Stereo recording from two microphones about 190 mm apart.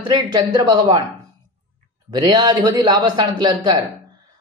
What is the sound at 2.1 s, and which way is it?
Speech, 20° right (ahead or behind).